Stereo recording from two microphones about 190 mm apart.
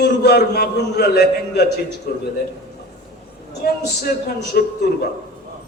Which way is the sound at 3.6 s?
50° left (ahead or behind).